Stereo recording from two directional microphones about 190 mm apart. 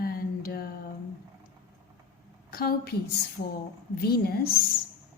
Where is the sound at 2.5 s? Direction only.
50° left (ahead or behind).